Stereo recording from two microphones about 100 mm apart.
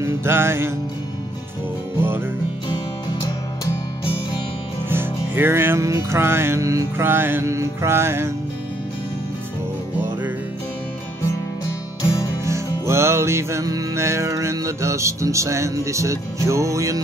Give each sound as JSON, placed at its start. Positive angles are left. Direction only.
{"t": 0.0, "sound": "music", "side_deg": -25}
{"t": 2.0, "sound": "music", "side_deg": -20}
{"t": 2.7, "sound": "music", "side_deg": 45}
{"t": 4.8, "sound": "music", "side_deg": -20}
{"t": 12.4, "sound": "music", "side_deg": -30}